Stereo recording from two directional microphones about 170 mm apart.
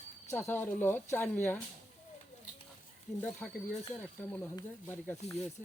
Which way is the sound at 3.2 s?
10° left (ahead or behind).